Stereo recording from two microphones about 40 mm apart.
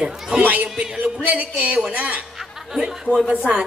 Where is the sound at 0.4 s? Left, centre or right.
Right.